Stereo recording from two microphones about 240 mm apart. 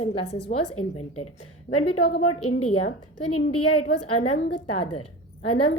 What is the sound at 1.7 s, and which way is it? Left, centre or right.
A woman's voice, left.